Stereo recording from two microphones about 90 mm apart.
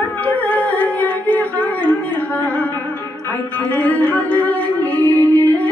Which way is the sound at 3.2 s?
20° left (ahead or behind).